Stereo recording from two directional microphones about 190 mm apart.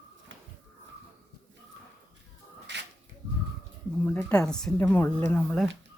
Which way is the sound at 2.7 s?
65° right (ahead or behind).